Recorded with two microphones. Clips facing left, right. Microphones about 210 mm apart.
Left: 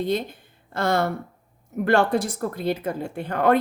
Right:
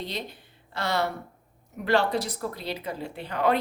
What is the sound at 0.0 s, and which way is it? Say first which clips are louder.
Speech: left 10 dB; 50° left (ahead or behind).